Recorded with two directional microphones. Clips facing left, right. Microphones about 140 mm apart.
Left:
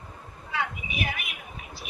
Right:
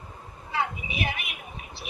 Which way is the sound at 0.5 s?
25° right (ahead or behind).